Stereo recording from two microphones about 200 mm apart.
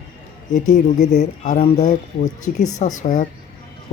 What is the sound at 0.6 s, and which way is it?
Speech, 35° left (ahead or behind).